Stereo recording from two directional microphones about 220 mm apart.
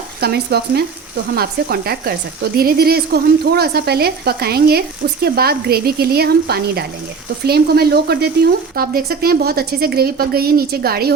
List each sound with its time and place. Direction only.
0.2 s speech: 45° right (ahead or behind)